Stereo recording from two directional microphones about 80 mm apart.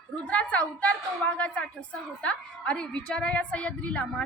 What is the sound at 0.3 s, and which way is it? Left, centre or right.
A woman's voice, centre.